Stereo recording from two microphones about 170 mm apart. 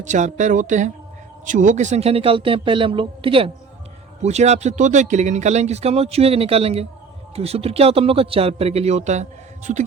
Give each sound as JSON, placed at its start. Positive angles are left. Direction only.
{"t": 0.0, "sound": "speech", "side_deg": -45}
{"t": 4.2, "sound": "speech", "side_deg": -40}